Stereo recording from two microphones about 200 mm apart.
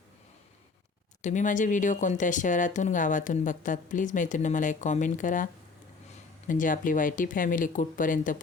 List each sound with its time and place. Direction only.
1.2 s speech: 40° left (ahead or behind)
6.5 s speech: 40° left (ahead or behind)